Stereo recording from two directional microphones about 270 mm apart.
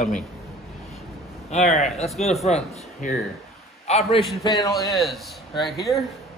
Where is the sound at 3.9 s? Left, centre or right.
Left.